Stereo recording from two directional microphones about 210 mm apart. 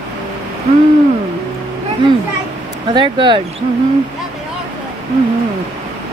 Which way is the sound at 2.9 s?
20° right (ahead or behind).